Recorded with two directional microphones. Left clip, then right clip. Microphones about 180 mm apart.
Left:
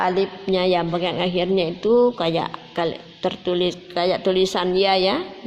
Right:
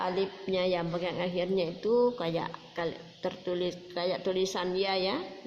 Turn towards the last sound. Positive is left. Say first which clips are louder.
# left 12 dB
turn(degrees=45)  # may be behind; listen again after turning